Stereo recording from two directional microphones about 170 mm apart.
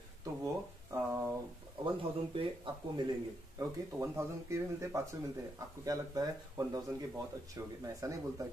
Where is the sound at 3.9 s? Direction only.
15° right (ahead or behind).